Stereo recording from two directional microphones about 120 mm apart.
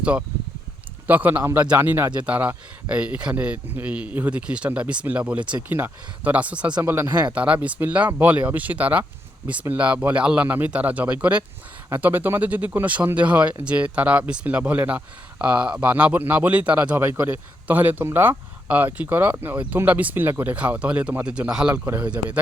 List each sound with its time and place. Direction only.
0.0 s speech: 10° right (ahead or behind)
6.8 s speech: 20° right (ahead or behind)
7.3 s speech: 10° right (ahead or behind)
21.8 s speech: 20° right (ahead or behind)